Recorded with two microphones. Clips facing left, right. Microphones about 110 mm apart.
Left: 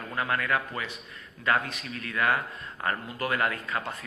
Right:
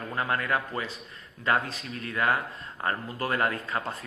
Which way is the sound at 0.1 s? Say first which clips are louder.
Even; 25° right (ahead or behind).